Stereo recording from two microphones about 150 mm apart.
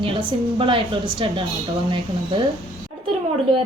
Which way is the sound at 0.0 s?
35° right (ahead or behind).